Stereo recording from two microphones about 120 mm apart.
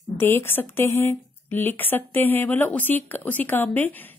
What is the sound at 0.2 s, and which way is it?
A woman's voice, 20° left (ahead or behind).